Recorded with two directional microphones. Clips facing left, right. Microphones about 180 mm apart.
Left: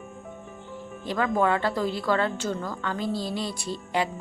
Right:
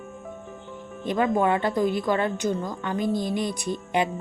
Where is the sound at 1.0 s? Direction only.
20° right (ahead or behind).